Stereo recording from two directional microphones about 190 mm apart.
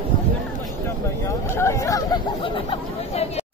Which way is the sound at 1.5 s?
15° left (ahead or behind).